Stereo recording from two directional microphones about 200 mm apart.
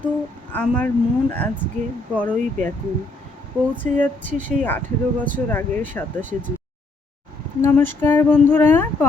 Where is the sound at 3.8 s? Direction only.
10° left (ahead or behind).